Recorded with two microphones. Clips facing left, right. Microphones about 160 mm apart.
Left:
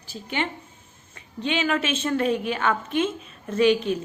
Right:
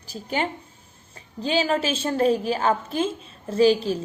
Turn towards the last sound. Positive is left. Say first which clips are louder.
# right 1 dB
turn(degrees=-35)  # may be behind; listen again after turning